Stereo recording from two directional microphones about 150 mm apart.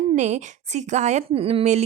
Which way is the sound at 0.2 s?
50° right (ahead or behind).